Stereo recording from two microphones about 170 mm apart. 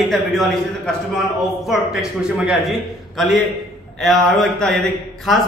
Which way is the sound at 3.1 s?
Centre (ahead or behind).